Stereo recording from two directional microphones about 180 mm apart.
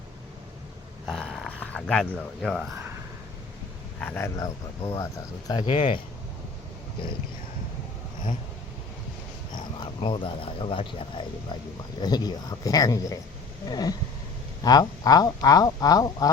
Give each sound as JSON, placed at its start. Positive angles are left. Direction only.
{"t": 1.0, "sound": "a sound", "side_deg": 0}
{"t": 2.1, "sound": "speech", "side_deg": 0}
{"t": 4.0, "sound": "speech", "side_deg": 10}
{"t": 9.8, "sound": "speech", "side_deg": 30}